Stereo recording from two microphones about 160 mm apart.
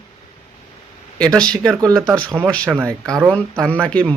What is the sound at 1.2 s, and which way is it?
Speech, 5° left (ahead or behind).